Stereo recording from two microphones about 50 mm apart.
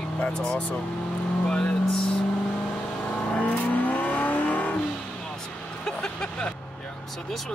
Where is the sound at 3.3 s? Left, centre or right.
Left.